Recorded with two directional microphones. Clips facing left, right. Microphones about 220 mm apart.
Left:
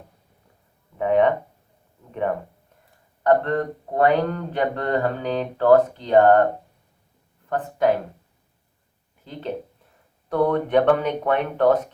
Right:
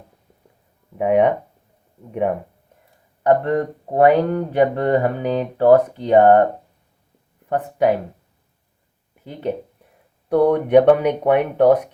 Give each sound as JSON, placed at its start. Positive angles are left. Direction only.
{"t": 0.9, "sound": "speech", "side_deg": -15}
{"t": 3.2, "sound": "speech", "side_deg": -15}
{"t": 7.5, "sound": "speech", "side_deg": -15}
{"t": 10.2, "sound": "speech", "side_deg": -15}